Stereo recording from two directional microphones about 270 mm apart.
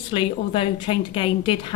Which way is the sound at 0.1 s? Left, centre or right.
Centre.